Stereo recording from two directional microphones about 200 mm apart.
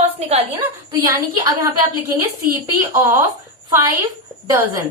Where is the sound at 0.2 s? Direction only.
30° right (ahead or behind).